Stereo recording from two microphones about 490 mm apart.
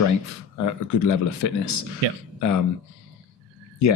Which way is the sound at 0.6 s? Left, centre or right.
Left.